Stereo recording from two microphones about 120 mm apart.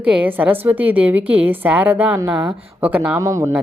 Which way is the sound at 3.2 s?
25° right (ahead or behind).